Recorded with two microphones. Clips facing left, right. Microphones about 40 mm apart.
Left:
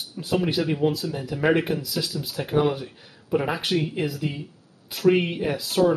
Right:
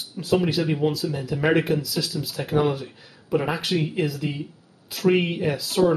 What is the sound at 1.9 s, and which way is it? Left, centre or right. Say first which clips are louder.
Speech: right 1 dB; centre.